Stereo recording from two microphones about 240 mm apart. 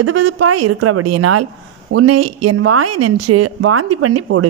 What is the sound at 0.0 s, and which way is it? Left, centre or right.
Speech, right.